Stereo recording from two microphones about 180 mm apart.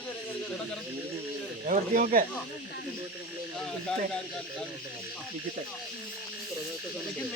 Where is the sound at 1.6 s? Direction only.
45° right (ahead or behind).